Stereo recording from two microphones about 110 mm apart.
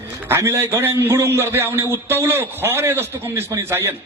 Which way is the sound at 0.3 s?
25° right (ahead or behind).